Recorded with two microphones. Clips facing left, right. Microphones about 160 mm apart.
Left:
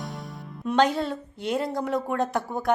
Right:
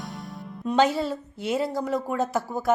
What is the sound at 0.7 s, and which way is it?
A woman's voice, 5° right (ahead or behind).